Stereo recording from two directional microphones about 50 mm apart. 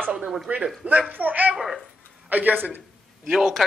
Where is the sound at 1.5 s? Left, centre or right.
Centre.